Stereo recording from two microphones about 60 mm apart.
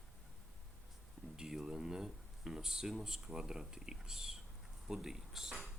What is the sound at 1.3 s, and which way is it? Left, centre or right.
Speech, centre.